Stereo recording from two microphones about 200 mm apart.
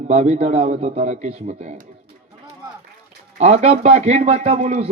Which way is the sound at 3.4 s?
30° right (ahead or behind).